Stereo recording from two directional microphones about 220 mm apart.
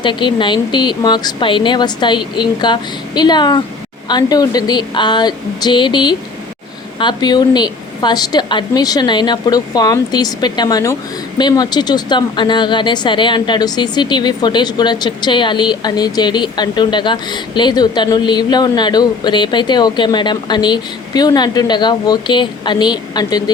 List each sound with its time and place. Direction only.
0.0 s speech: 20° left (ahead or behind)